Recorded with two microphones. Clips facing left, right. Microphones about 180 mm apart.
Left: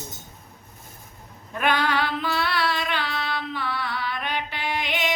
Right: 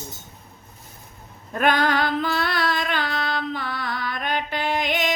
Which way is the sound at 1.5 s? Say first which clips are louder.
Right 3 dB; 45° right (ahead or behind).